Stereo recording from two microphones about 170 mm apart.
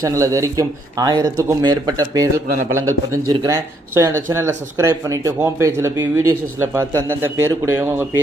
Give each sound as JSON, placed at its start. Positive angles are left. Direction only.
{"t": 0.0, "sound": "speech", "side_deg": -20}